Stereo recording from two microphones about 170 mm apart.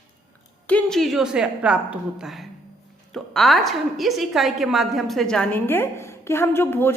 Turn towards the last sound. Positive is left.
turn(degrees=15)  # may be behind; listen again after turning